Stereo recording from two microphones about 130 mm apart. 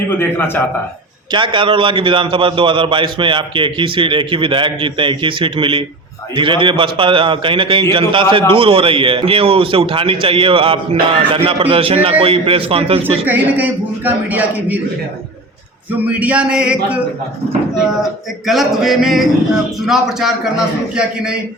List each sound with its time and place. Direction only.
0.2 s a man's voice: 15° left (ahead or behind)
1.3 s a man's voice: 40° right (ahead or behind)
13.2 s a man's voice: 15° right (ahead or behind)
15.9 s a man's voice: 10° right (ahead or behind)
18.0 s a man's voice: centre (ahead or behind)